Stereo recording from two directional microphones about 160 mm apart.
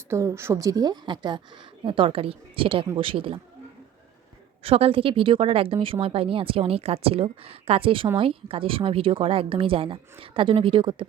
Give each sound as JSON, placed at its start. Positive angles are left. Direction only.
{"t": 0.1, "sound": "a woman's voice", "side_deg": -15}
{"t": 4.6, "sound": "speech", "side_deg": -35}